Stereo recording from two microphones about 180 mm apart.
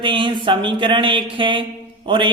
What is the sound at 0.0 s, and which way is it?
Speech, 25° right (ahead or behind).